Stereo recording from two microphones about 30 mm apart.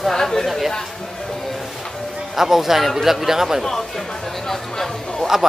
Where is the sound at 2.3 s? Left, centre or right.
Centre.